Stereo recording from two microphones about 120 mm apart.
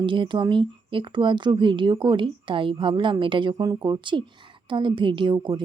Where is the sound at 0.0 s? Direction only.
45° right (ahead or behind).